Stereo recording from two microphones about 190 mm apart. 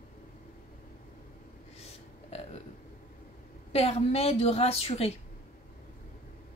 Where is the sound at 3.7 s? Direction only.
30° left (ahead or behind).